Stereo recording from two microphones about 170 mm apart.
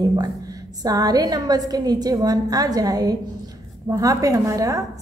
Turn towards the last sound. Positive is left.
turn(degrees=-20)  # may be behind; listen again after turning